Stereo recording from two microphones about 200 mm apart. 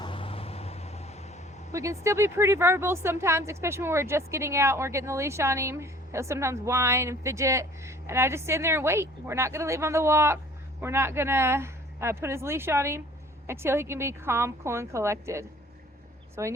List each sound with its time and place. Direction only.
0.0 s vehicle: 25° left (ahead or behind)
1.7 s a woman's voice: 15° right (ahead or behind)